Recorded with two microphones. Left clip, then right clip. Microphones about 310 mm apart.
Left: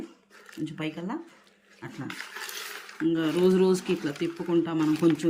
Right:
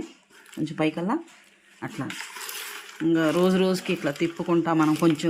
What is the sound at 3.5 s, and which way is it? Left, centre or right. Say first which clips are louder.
Speech: even; centre.